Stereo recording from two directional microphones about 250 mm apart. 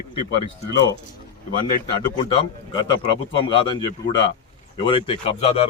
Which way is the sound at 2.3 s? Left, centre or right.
Centre.